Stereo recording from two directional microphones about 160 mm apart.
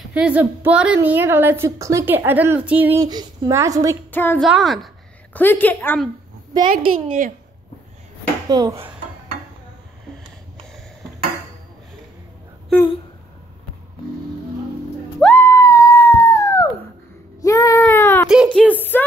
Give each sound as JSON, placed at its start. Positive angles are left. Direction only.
{"t": 0.1, "sound": "a woman's voice", "side_deg": -10}
{"t": 3.0, "sound": "speech", "side_deg": -25}
{"t": 4.1, "sound": "a woman's voice", "side_deg": 10}
{"t": 4.4, "sound": "a woman's voice", "side_deg": 0}
{"t": 5.3, "sound": "a woman's voice", "side_deg": 10}
{"t": 6.7, "sound": "a woman's voice", "side_deg": -55}
{"t": 8.5, "sound": "speech", "side_deg": -25}
{"t": 15.1, "sound": "dog", "side_deg": 10}
{"t": 17.4, "sound": "a sound", "side_deg": 20}
{"t": 18.3, "sound": "a sound", "side_deg": -5}
{"t": 18.6, "sound": "speech", "side_deg": 10}